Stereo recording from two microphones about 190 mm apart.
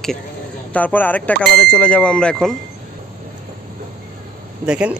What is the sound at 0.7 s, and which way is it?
Speech, 10° left (ahead or behind).